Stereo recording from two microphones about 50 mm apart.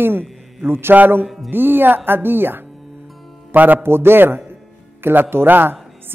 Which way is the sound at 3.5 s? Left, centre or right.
Right.